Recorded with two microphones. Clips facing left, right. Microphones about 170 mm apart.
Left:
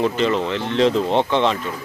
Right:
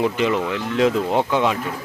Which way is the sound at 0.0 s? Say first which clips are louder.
Left 1 dB; 10° right (ahead or behind).